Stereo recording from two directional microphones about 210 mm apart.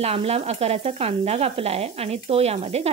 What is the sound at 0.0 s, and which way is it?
Speech, 30° right (ahead or behind).